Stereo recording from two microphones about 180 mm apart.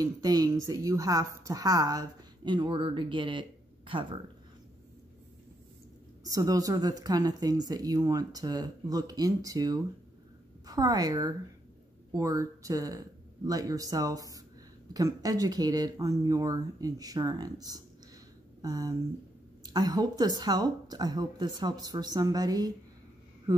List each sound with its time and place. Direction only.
0.0 s speech: 20° right (ahead or behind)
6.3 s speech: 20° right (ahead or behind)